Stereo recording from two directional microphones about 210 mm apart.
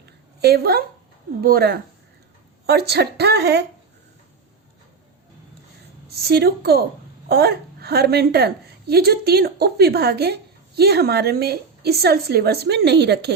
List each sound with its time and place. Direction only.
0.0 s a sound: 50° right (ahead or behind)
1.4 s a woman's voice: 45° right (ahead or behind)
6.1 s a woman's voice: 50° right (ahead or behind)